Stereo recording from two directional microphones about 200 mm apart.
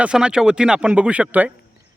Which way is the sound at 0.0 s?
5° right (ahead or behind).